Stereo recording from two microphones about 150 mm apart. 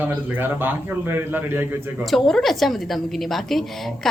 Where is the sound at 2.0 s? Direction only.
Centre (ahead or behind).